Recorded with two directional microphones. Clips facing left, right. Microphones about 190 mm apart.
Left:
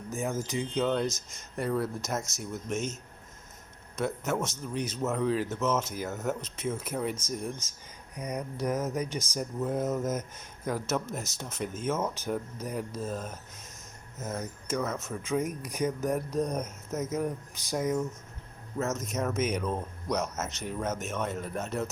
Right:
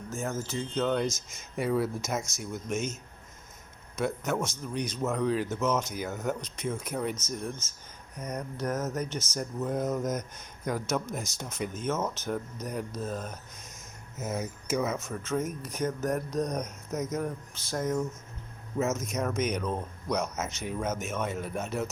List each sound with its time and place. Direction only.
0.1 s speech: 15° left (ahead or behind)
0.8 s speech: 5° left (ahead or behind)
14.2 s speech: 5° right (ahead or behind)
15.2 s speech: 10° left (ahead or behind)
18.8 s speech: 5° right (ahead or behind)